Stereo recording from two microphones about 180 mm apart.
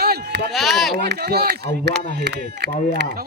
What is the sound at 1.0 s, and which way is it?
Speech, 65° right (ahead or behind).